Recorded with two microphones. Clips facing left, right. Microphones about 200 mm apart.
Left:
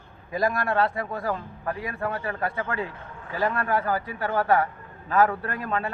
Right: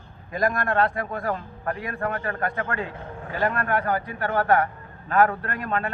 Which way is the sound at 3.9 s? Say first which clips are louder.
Right 1 dB; 5° left (ahead or behind).